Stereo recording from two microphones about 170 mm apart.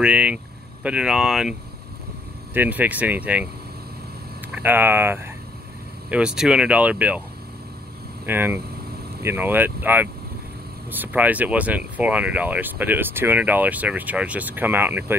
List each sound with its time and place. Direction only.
0.0 s speech: 10° right (ahead or behind)
4.6 s speech: 10° right (ahead or behind)
8.3 s speech: 10° right (ahead or behind)